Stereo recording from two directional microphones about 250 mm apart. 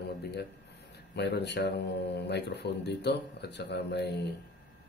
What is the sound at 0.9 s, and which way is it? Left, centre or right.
Speech, left.